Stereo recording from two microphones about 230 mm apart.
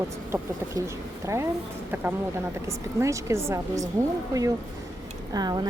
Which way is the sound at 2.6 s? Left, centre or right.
Centre.